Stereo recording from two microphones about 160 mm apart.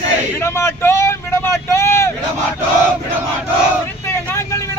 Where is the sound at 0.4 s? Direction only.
15° left (ahead or behind).